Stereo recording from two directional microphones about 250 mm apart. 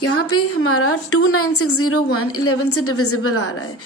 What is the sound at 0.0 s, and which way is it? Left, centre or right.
A woman's voice, left.